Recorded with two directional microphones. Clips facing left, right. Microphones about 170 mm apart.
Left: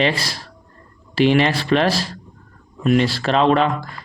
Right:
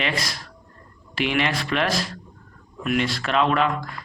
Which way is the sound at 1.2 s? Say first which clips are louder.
Left 8 dB; 35° left (ahead or behind).